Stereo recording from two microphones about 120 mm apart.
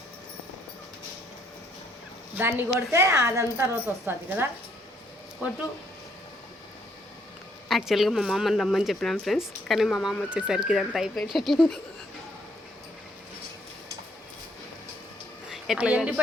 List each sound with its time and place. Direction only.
2.4 s a woman's voice: 20° right (ahead or behind)
7.7 s speech: centre (ahead or behind)
15.4 s speech: centre (ahead or behind)